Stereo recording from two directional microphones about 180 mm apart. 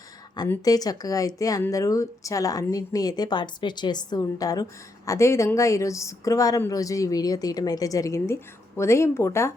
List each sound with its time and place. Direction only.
0.4 s speech: 15° left (ahead or behind)